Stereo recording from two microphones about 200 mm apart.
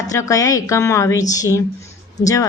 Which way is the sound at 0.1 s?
15° left (ahead or behind).